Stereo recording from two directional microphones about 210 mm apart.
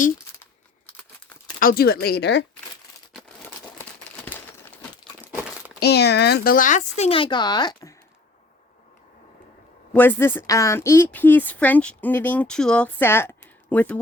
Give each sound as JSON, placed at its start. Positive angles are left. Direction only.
{"t": 1.5, "sound": "speech", "side_deg": 45}
{"t": 5.8, "sound": "speech", "side_deg": 50}
{"t": 9.9, "sound": "speech", "side_deg": 10}